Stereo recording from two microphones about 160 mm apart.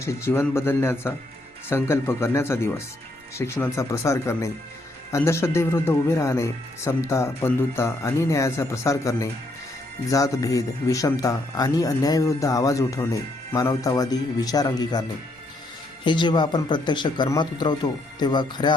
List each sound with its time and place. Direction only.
0.0 s speech: 20° left (ahead or behind)
16.0 s speech: 30° left (ahead or behind)